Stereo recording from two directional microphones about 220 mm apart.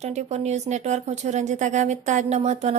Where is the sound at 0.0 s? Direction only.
30° right (ahead or behind).